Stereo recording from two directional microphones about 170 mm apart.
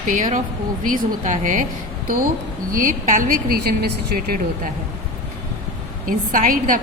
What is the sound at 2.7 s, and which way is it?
A woman's voice, 50° right (ahead or behind).